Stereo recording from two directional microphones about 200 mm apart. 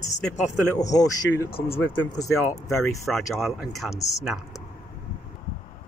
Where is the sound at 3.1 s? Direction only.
Centre (ahead or behind).